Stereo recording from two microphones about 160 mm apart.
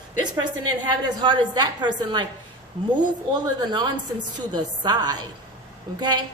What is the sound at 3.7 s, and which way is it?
A woman's voice, 25° right (ahead or behind).